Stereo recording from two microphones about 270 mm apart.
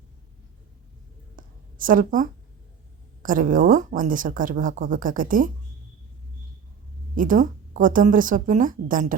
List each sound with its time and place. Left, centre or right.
1.4 s a sound: right
3.2 s speech: right
7.2 s speech: right